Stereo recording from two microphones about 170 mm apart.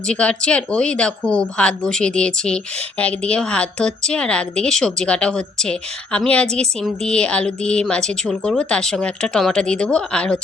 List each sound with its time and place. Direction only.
0.1 s speech: 5° left (ahead or behind)